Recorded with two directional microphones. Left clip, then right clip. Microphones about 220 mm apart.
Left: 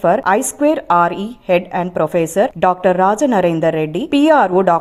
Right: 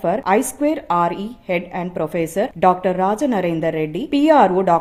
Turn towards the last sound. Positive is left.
turn(degrees=25)  # may be behind; listen again after turning